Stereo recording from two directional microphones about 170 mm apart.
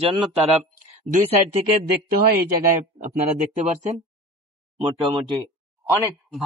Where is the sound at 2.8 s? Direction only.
45° right (ahead or behind).